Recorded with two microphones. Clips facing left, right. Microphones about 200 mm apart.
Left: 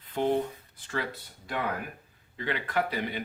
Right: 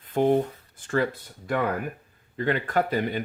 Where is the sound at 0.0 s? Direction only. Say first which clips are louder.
Right 6 dB; 50° right (ahead or behind).